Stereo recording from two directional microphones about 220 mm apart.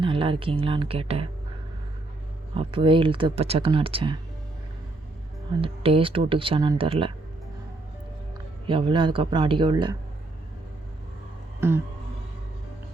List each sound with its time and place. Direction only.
0.0 s speech: 25° right (ahead or behind)
2.6 s speech: 25° right (ahead or behind)
5.5 s speech: 25° right (ahead or behind)
8.6 s speech: 25° right (ahead or behind)
11.6 s music: 10° right (ahead or behind)